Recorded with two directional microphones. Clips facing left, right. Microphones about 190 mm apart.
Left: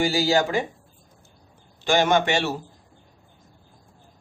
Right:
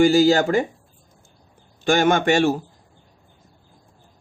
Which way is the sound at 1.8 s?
50° right (ahead or behind).